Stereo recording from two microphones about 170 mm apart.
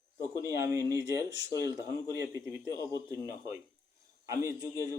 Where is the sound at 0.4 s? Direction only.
15° right (ahead or behind).